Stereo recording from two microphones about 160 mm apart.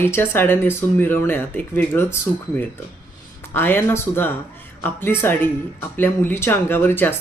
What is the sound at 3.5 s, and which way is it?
Speech, 15° left (ahead or behind).